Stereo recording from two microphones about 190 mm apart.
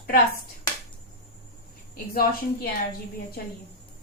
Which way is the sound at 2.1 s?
55° left (ahead or behind).